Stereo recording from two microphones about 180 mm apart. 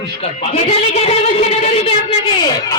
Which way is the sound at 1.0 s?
35° left (ahead or behind).